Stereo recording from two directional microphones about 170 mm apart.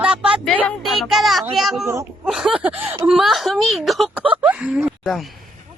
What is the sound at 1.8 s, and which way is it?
Speech, 15° right (ahead or behind).